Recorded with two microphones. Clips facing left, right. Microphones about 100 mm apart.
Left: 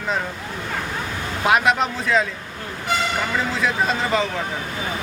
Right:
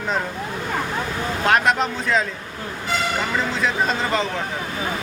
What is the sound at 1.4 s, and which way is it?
Speech, 5° left (ahead or behind).